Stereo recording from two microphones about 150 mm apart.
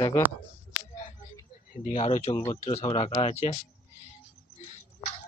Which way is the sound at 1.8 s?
50° left (ahead or behind).